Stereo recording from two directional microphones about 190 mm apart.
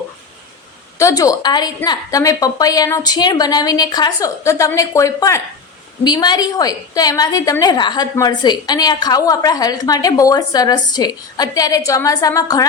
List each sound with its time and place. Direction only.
0.9 s a woman's voice: 15° left (ahead or behind)